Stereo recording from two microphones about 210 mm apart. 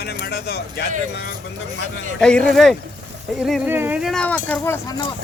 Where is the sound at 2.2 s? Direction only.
5° left (ahead or behind).